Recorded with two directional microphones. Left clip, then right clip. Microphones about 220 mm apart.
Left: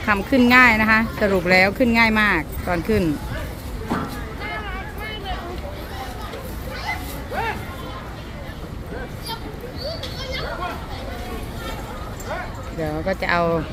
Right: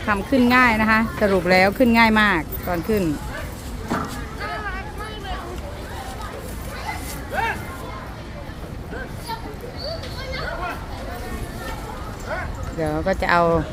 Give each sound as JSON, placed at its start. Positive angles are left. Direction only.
{"t": 0.0, "sound": "speech", "side_deg": 0}
{"t": 12.8, "sound": "speech", "side_deg": -10}